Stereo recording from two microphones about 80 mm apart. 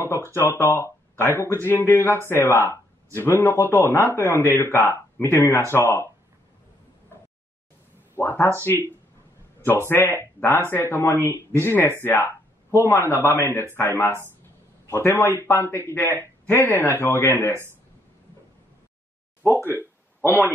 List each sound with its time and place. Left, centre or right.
0.3 s speech: left
8.2 s a man's voice: left
19.5 s a sound: right
20.2 s speech: left